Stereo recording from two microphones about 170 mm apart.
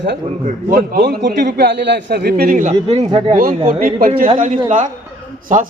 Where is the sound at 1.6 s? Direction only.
80° right; by 3.4 s 40° right (ahead or behind).